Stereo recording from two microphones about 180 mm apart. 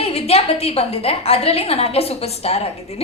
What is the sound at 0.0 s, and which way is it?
A woman's voice, 35° left (ahead or behind).